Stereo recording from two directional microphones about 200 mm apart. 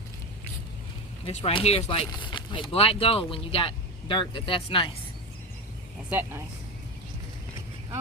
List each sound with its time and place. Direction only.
1.2 s speech: 30° left (ahead or behind)
6.1 s speech: 10° right (ahead or behind)